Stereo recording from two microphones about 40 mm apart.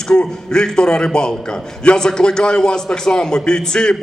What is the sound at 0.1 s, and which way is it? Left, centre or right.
A man's voice, centre.